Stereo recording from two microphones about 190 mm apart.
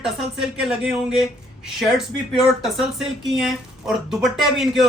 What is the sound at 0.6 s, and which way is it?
Speech, 5° right (ahead or behind).